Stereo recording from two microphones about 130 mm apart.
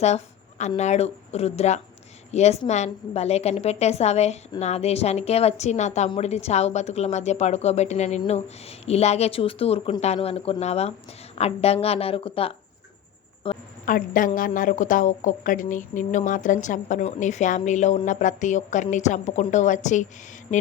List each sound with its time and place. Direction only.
0.8 s a woman's voice: 60° left (ahead or behind)
13.8 s a woman's voice: 90° left
17.0 s a woman's voice: 60° left (ahead or behind)